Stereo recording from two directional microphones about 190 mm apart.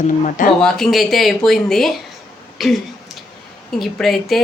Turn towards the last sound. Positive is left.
turn(degrees=0)  # may be behind; listen again after turning